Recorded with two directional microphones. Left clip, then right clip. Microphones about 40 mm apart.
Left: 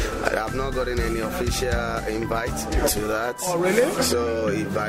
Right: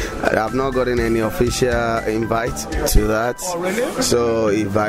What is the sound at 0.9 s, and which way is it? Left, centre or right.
Speech, centre.